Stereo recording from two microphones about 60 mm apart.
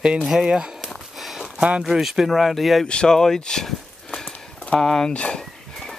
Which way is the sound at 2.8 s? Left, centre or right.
Centre.